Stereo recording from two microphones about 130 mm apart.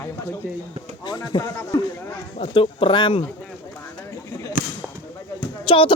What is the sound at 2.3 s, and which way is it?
Speech, 45° left (ahead or behind).